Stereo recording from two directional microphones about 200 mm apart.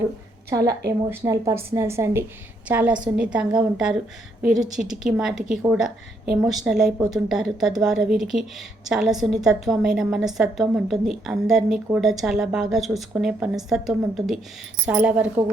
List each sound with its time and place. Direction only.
0.5 s a woman's voice: 20° right (ahead or behind)